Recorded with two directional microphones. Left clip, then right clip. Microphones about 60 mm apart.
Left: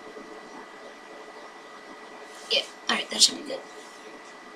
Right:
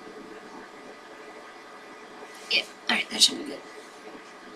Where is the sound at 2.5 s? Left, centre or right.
Left.